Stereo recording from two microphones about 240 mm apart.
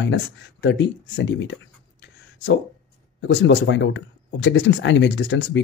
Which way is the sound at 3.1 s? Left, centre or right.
Left.